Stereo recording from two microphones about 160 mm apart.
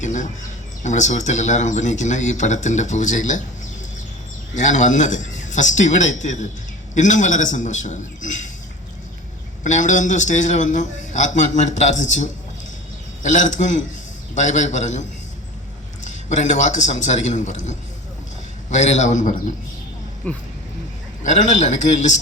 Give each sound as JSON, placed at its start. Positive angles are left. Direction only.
{"t": 0.0, "sound": "bird", "side_deg": 50}
{"t": 0.8, "sound": "a man's voice", "side_deg": 50}
{"t": 4.5, "sound": "a man's voice", "side_deg": 50}
{"t": 9.6, "sound": "a man's voice", "side_deg": 50}
{"t": 16.0, "sound": "a man's voice", "side_deg": 45}
{"t": 20.2, "sound": "speech", "side_deg": 10}
{"t": 21.2, "sound": "a man's voice", "side_deg": 50}